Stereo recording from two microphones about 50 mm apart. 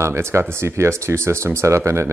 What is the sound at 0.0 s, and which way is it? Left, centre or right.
Speech, right.